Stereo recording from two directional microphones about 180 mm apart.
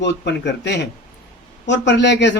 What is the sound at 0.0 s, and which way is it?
Speech, 75° left (ahead or behind).